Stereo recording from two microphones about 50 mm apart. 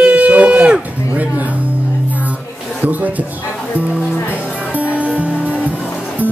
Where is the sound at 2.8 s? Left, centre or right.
Right.